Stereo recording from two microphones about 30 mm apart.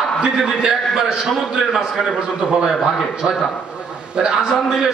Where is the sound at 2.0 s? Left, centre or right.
Centre.